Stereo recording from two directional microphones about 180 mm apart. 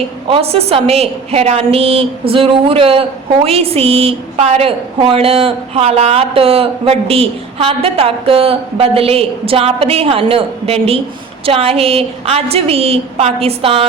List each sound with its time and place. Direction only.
0.3 s a woman's voice: 35° right (ahead or behind)